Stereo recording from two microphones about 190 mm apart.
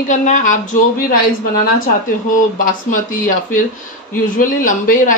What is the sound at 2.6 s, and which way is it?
A woman's voice, 45° left (ahead or behind).